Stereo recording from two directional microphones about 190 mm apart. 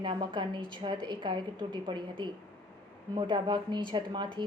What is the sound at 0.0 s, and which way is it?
A woman's voice, 25° right (ahead or behind).